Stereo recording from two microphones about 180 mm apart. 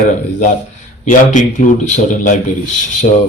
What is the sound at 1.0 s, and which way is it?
Speech, 45° left (ahead or behind).